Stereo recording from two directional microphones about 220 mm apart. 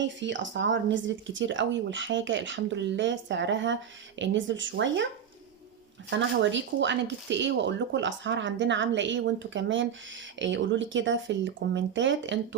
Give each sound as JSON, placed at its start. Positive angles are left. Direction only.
{"t": 0.0, "sound": "speech", "side_deg": -55}
{"t": 6.1, "sound": "speech", "side_deg": -55}